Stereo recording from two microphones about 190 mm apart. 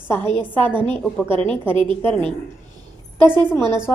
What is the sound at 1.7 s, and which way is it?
Speech, 25° right (ahead or behind).